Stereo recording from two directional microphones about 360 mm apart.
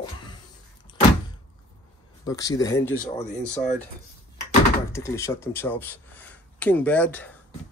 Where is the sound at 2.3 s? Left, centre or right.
Centre.